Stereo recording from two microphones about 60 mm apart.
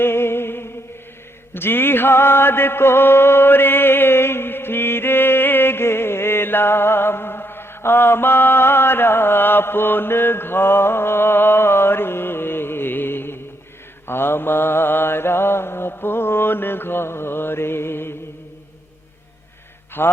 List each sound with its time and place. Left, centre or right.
0.0 s music: left
1.5 s mantra: left
20.0 s mantra: left